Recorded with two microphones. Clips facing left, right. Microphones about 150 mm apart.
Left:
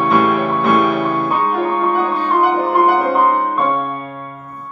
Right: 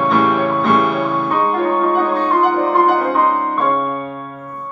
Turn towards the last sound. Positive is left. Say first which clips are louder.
# even
turn(degrees=5)  # may be behind; listen again after turning